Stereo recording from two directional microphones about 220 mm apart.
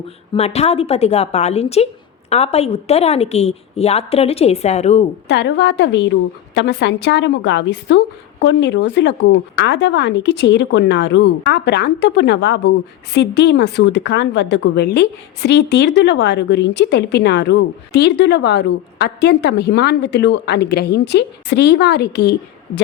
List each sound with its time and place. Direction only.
0.3 s a woman's voice: 30° left (ahead or behind)
5.3 s a woman's voice: 55° left (ahead or behind)